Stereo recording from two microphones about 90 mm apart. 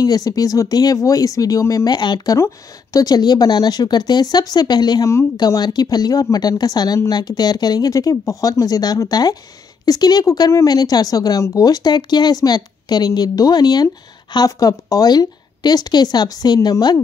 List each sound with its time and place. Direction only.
0.0 s speech: 45° left (ahead or behind)
1.9 s speech: 55° left (ahead or behind)
2.3 s speech: 35° left (ahead or behind)